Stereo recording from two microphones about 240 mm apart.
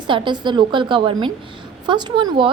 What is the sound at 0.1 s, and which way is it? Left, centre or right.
A woman's voice, centre.